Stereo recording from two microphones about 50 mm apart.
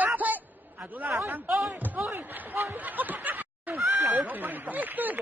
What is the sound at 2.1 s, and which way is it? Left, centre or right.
Speech, right.